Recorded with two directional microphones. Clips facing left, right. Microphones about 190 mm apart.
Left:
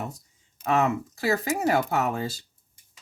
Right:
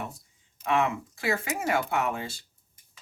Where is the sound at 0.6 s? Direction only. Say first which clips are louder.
Left 3 dB; 40° left (ahead or behind).